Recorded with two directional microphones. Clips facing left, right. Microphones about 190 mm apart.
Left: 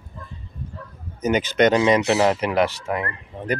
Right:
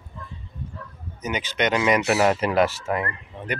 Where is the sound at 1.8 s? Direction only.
25° left (ahead or behind).